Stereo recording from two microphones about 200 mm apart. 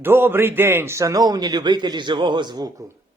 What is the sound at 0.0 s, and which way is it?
A man's voice, 10° right (ahead or behind).